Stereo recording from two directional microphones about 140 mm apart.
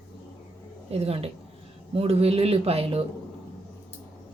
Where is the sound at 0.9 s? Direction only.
45° right (ahead or behind).